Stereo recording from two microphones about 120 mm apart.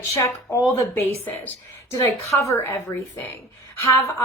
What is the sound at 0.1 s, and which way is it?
Speech, 25° left (ahead or behind).